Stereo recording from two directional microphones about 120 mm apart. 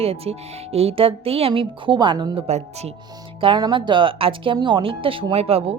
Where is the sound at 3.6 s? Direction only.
40° right (ahead or behind).